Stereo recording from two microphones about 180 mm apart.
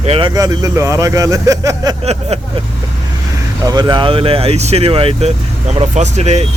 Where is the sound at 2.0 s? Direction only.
35° right (ahead or behind).